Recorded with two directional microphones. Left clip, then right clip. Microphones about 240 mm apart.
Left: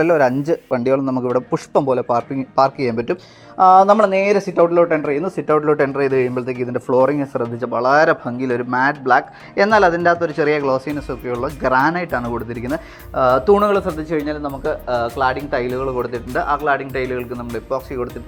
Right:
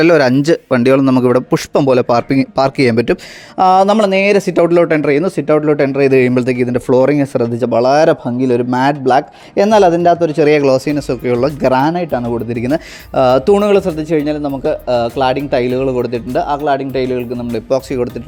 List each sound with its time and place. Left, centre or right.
0.7 s speech: right